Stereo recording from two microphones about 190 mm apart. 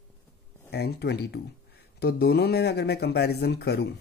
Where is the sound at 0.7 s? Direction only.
60° left (ahead or behind).